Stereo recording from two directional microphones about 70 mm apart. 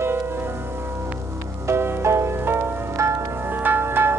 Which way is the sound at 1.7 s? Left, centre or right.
Right.